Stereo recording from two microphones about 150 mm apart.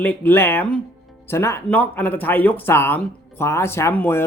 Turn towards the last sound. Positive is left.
turn(degrees=15)  # may be behind; listen again after turning